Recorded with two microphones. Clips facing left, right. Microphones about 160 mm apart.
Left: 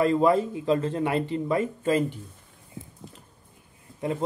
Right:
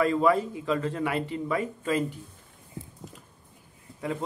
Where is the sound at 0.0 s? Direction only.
25° left (ahead or behind).